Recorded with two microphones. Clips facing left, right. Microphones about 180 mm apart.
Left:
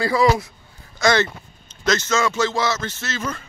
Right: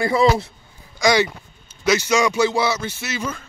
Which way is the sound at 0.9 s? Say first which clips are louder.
Right 1 dB; 15° right (ahead or behind).